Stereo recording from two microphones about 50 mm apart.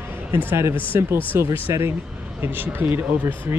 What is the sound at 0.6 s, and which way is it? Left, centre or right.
Speech, right.